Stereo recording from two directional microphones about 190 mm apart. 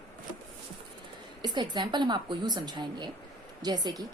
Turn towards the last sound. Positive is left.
turn(degrees=-20)  # may be behind; listen again after turning